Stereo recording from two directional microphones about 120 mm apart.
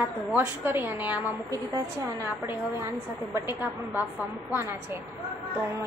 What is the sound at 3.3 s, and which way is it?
Speech, 25° right (ahead or behind).